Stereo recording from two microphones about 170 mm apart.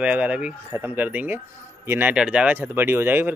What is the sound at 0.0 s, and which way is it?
Speech, 10° right (ahead or behind).